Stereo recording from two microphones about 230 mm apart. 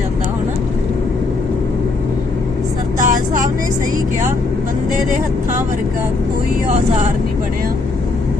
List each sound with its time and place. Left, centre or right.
3.0 s vehicle: right